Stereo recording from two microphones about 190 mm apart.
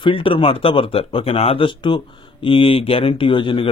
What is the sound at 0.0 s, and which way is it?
A man's voice, 30° left (ahead or behind).